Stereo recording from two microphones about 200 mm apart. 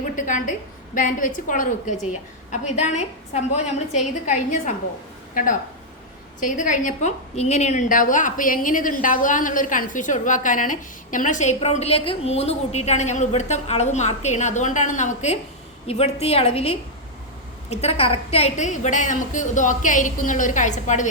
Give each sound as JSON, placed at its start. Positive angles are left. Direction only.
{"t": 0.0, "sound": "a woman's voice", "side_deg": 40}
{"t": 6.4, "sound": "a woman's voice", "side_deg": 40}